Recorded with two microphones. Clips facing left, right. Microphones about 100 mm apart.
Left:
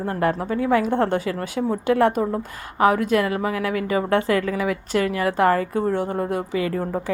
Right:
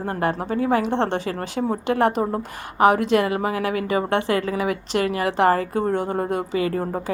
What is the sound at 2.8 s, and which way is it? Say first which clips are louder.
Speech: right 1 dB; 70° right (ahead or behind).